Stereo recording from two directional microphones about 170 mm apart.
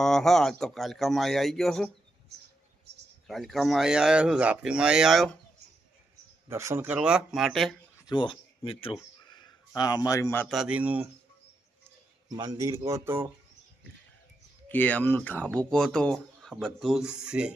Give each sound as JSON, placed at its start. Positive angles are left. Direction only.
{"t": 0.0, "sound": "speech", "side_deg": 5}
{"t": 3.2, "sound": "speech", "side_deg": 0}
{"t": 6.5, "sound": "speech", "side_deg": -15}
{"t": 8.0, "sound": "speech", "side_deg": 25}
{"t": 10.5, "sound": "speech", "side_deg": -5}
{"t": 12.3, "sound": "speech", "side_deg": -20}
{"t": 14.7, "sound": "speech", "side_deg": 10}